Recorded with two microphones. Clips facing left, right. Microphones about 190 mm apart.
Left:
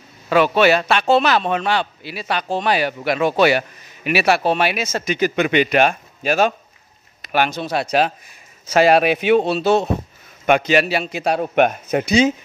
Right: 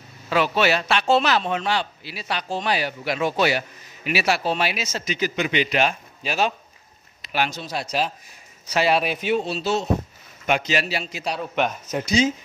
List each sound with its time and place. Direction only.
0.3 s a man's voice: 55° left (ahead or behind)
8.6 s speech: 50° left (ahead or behind)
9.0 s a man's voice: 70° left (ahead or behind)